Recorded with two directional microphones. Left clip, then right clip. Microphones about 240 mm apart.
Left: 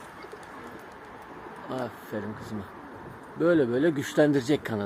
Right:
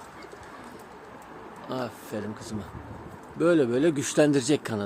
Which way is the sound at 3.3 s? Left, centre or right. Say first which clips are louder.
Right 1 dB; centre.